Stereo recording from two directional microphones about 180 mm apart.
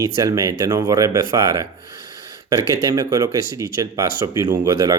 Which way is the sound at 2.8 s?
15° right (ahead or behind).